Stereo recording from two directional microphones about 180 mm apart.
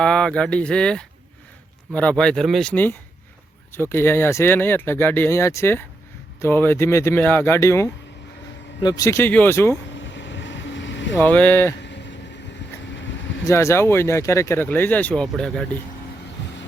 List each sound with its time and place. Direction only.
0.0 s speech: 5° left (ahead or behind)
9.9 s vehicle: 90° left
11.2 s speech: 10° left (ahead or behind)
11.8 s a sound: 80° left
12.8 s vehicle: 90° left
13.5 s speech: 15° left (ahead or behind)